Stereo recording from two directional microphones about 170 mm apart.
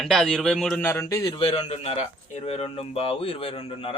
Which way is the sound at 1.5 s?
40° left (ahead or behind).